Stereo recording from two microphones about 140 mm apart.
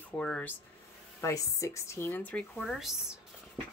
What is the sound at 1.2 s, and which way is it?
Speech, 25° left (ahead or behind).